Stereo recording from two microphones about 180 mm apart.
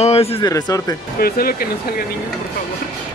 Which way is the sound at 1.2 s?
55° left (ahead or behind).